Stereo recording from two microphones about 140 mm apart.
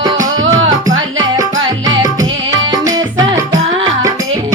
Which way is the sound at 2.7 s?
25° right (ahead or behind).